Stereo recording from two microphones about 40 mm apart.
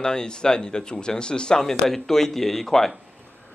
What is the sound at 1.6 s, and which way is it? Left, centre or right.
A man's voice, centre.